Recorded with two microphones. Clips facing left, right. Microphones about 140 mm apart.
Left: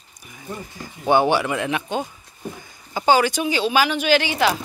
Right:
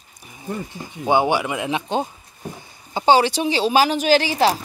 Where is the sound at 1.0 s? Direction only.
15° right (ahead or behind).